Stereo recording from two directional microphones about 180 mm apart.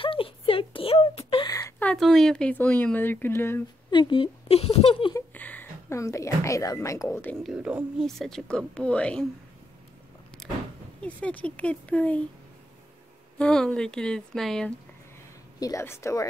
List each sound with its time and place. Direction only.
0.0 s a sound: 30° left (ahead or behind)
1.5 s a sound: 20° left (ahead or behind)
1.9 s speech: centre (ahead or behind)
3.9 s speech: 25° left (ahead or behind)
5.1 s a woman's voice: 10° left (ahead or behind)
7.4 s speech: 5° right (ahead or behind)
10.4 s vehicle: centre (ahead or behind)
11.0 s speech: 5° left (ahead or behind)
13.4 s speech: 5° left (ahead or behind)
15.6 s speech: 15° left (ahead or behind)